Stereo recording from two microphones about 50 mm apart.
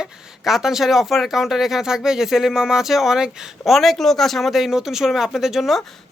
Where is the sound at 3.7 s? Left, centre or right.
Centre.